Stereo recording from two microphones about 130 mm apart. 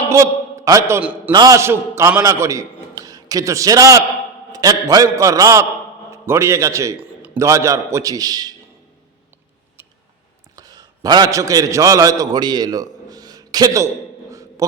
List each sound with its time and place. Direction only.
0.1 s a sound: 25° right (ahead or behind)
1.3 s a man's voice: 30° right (ahead or behind)
10.5 s a man's voice: 30° right (ahead or behind)